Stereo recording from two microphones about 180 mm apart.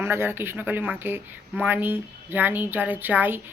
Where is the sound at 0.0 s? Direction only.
15° right (ahead or behind).